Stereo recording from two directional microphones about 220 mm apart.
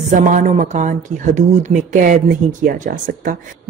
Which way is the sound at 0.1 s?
35° right (ahead or behind).